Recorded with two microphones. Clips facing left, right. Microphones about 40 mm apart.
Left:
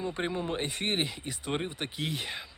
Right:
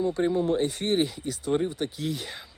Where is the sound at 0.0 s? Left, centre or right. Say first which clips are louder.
Right 8 dB; left.